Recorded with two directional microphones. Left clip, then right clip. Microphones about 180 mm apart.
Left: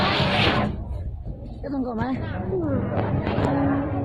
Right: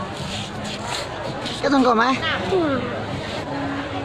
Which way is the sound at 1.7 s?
30° right (ahead or behind).